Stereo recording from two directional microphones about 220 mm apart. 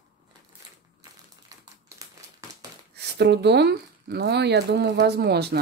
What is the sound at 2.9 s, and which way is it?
Speech, 50° right (ahead or behind).